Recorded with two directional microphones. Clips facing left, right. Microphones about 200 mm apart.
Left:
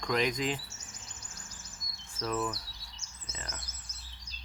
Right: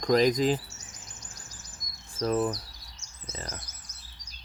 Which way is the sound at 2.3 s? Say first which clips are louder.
Right 6 dB; 45° right (ahead or behind).